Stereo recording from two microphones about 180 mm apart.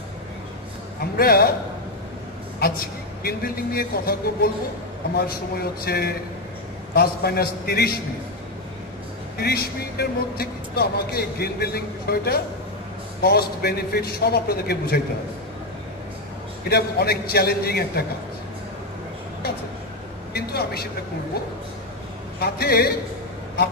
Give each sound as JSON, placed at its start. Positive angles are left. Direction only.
{"t": 1.1, "sound": "a man's voice", "side_deg": 55}
{"t": 3.3, "sound": "a man's voice", "side_deg": 55}
{"t": 9.4, "sound": "a man's voice", "side_deg": 60}
{"t": 16.6, "sound": "a man's voice", "side_deg": 60}
{"t": 20.3, "sound": "a man's voice", "side_deg": 60}
{"t": 22.4, "sound": "a man's voice", "side_deg": 60}